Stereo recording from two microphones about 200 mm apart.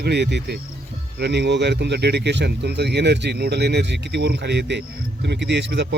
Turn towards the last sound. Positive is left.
turn(degrees=-60)  # may be behind; listen again after turning